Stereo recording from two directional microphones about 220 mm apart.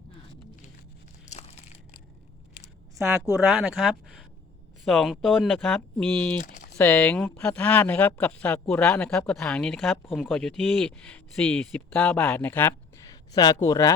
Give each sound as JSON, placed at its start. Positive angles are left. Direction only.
{"t": 1.2, "sound": "crushing", "side_deg": 30}
{"t": 3.6, "sound": "speech", "side_deg": 0}
{"t": 6.4, "sound": "speech", "side_deg": 35}
{"t": 6.7, "sound": "speech", "side_deg": 10}